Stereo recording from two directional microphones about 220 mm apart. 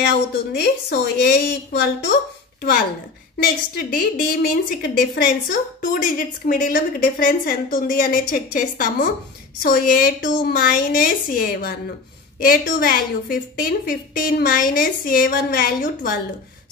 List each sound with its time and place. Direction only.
0.0 s a woman's voice: 50° left (ahead or behind)
3.4 s a woman's voice: 40° left (ahead or behind)